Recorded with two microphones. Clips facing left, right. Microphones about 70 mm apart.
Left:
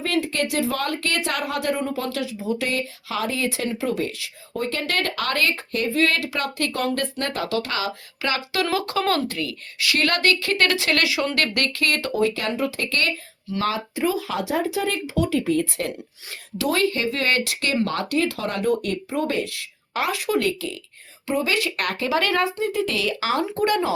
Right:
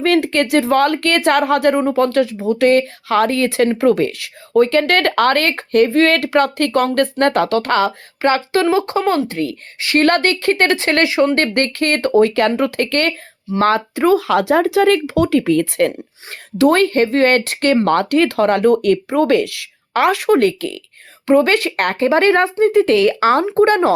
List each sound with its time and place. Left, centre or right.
0.0 s a woman's voice: right
8.6 s speech: right
9.4 s speech: right
12.4 s a woman's voice: right
15.9 s a woman's voice: right